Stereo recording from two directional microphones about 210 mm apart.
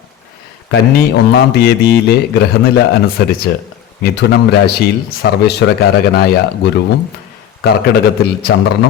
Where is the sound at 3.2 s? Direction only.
55° left (ahead or behind).